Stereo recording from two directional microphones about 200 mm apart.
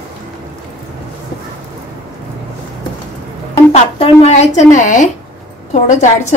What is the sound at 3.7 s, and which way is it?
A woman's voice, 30° left (ahead or behind).